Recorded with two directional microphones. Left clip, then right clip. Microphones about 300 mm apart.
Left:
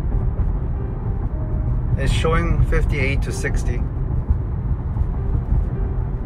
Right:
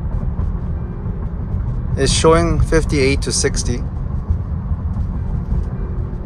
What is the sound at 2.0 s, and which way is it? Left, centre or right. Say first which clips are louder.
Speech: right 9 dB; centre.